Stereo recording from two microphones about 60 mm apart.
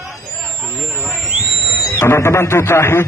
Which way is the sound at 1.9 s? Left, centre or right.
Left.